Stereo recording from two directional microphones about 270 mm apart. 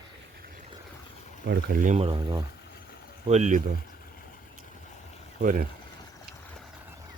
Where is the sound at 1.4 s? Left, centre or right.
Right.